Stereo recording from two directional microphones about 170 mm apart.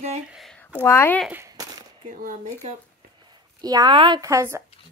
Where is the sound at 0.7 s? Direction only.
15° left (ahead or behind).